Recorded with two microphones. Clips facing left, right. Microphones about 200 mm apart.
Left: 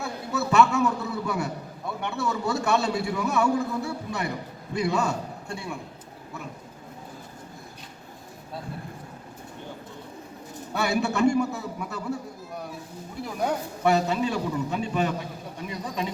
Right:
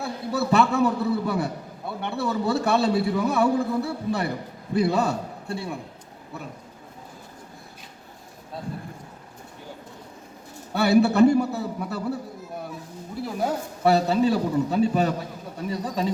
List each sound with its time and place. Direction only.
0.0 s a man's voice: 30° right (ahead or behind)
10.8 s a man's voice: 35° right (ahead or behind)
13.8 s a man's voice: 35° right (ahead or behind)